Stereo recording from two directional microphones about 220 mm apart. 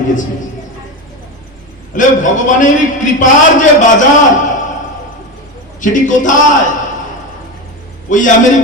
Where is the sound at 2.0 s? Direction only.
35° left (ahead or behind).